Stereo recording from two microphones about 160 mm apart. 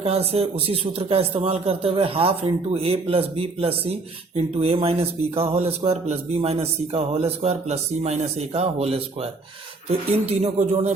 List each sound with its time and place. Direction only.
0.0 s speech: 40° right (ahead or behind)